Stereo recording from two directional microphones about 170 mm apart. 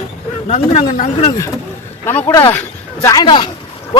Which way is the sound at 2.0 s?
15° left (ahead or behind).